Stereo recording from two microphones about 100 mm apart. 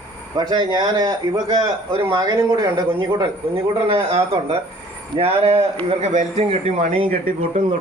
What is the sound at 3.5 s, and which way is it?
A man's voice, 80° right.